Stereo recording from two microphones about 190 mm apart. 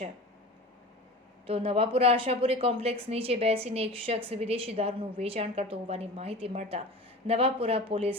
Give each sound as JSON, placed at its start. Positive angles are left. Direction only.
{"t": 1.5, "sound": "a woman's voice", "side_deg": -30}